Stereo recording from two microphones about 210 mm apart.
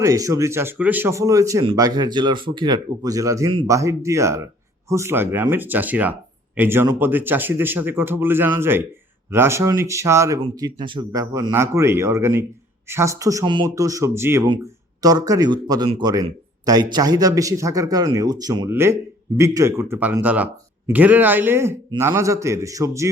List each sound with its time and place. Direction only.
0.0 s speech: 15° right (ahead or behind)